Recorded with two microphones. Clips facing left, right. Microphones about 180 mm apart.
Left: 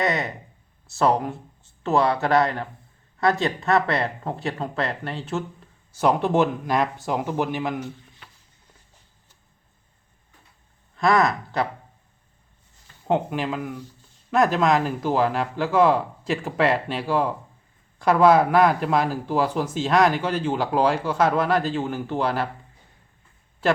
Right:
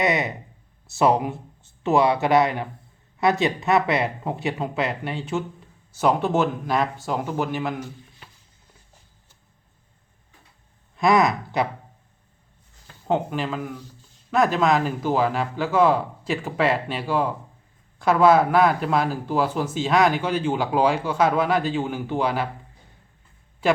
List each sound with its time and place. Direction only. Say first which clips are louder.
0.0 s speech: right 2 dB; 20° right (ahead or behind)
0.9 s speech: right 1 dB; 5° right (ahead or behind)
1.1 s speech: right 1 dB; 15° right (ahead or behind); by 7.8 s centre (ahead or behind)
10.9 s speech: right 1 dB; 15° right (ahead or behind)
13.1 s speech: left 1 dB; centre (ahead or behind)
18.5 s speech: left 1 dB; 5° right (ahead or behind)